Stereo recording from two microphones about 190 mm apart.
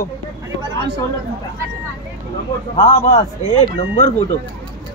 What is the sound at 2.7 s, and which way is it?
A man's voice, 35° left (ahead or behind).